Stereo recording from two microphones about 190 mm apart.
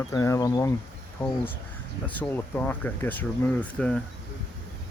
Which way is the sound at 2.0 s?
10° left (ahead or behind).